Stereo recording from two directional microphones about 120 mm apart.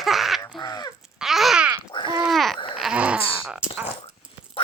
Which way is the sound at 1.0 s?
5° right (ahead or behind).